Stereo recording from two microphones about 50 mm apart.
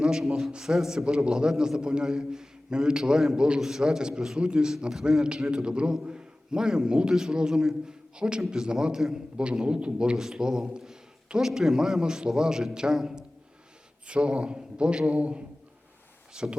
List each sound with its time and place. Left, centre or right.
0.0 s a man's voice: centre
14.1 s speech: right